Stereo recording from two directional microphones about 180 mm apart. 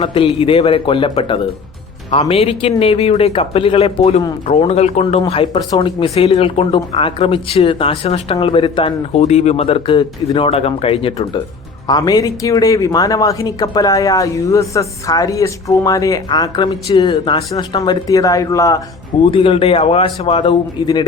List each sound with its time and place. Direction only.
0.0 s speech: 30° left (ahead or behind)
11.9 s speech: 20° left (ahead or behind)
19.2 s speech: 30° left (ahead or behind)